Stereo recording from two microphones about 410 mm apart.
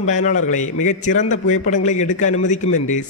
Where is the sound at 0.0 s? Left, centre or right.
Centre.